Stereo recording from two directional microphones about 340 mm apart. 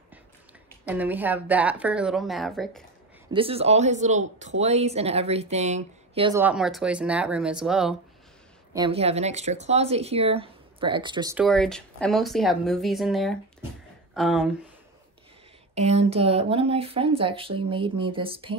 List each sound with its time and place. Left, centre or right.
0.8 s a woman's voice: centre
3.3 s speech: centre
8.7 s speech: centre
11.4 s a woman's voice: centre
15.7 s speech: centre